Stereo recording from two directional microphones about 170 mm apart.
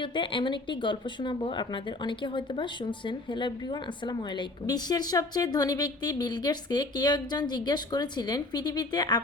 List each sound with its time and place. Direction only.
0.0 s speech: 30° left (ahead or behind)